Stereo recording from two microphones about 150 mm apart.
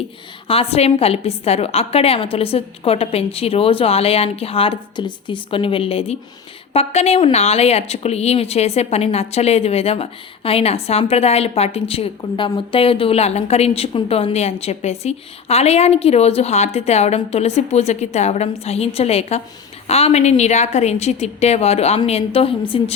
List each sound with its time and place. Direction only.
0.4 s a woman's voice: 40° left (ahead or behind)